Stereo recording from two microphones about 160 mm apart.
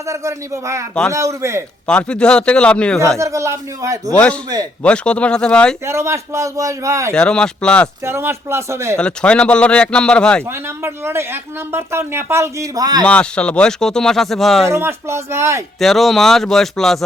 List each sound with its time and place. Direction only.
0.0 s a man's voice: 20° right (ahead or behind)
1.9 s speech: 5° left (ahead or behind)
3.2 s a man's voice: 20° right (ahead or behind)
4.8 s speech: 5° left (ahead or behind)
5.8 s a man's voice: 15° right (ahead or behind)
7.1 s speech: 5° left (ahead or behind)
8.0 s speech: 15° right (ahead or behind)
9.0 s speech: 5° left (ahead or behind)
10.4 s speech: 15° right (ahead or behind)
13.1 s speech: 5° left (ahead or behind)
14.7 s speech: 15° right (ahead or behind)
15.8 s speech: centre (ahead or behind)